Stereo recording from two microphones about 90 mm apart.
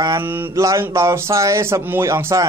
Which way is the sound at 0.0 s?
40° right (ahead or behind).